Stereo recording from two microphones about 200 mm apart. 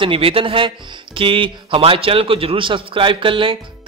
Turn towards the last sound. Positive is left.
turn(degrees=-25)  # may be behind; listen again after turning